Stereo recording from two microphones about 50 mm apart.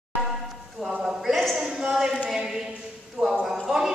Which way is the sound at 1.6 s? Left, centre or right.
Centre.